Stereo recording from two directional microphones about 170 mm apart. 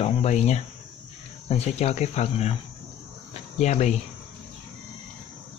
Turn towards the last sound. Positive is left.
turn(degrees=40)  # may be behind; listen again after turning